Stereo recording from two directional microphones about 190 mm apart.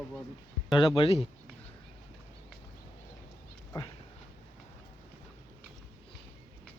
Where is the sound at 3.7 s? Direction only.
15° left (ahead or behind).